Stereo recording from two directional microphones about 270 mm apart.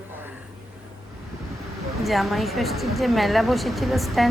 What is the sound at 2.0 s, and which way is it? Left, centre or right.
A woman's voice, centre.